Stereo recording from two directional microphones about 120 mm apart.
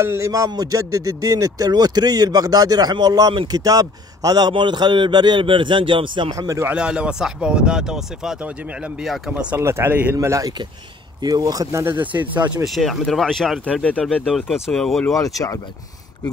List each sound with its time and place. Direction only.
0.0 s speech: 25° right (ahead or behind); by 6.3 s 45° right (ahead or behind)
6.3 s speech: 25° right (ahead or behind)
6.7 s speech: 10° right (ahead or behind)
9.6 s speech: 20° right (ahead or behind)
11.8 s speech: 15° right (ahead or behind)
12.6 s speech: centre (ahead or behind)
14.2 s speech: centre (ahead or behind)
15.1 s speech: 30° left (ahead or behind)